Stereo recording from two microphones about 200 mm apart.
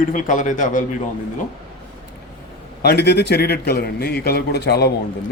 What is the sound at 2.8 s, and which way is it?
A man's voice, 55° left (ahead or behind).